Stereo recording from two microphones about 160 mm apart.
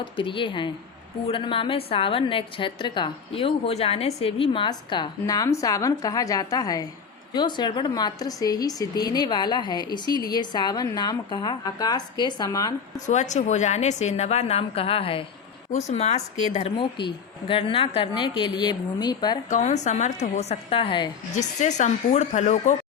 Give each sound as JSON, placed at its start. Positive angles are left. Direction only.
{"t": 0.0, "sound": "a woman's voice", "side_deg": 30}
{"t": 13.1, "sound": "a woman's voice", "side_deg": 45}
{"t": 19.5, "sound": "a woman's voice", "side_deg": 50}
{"t": 21.3, "sound": "a woman's voice", "side_deg": 45}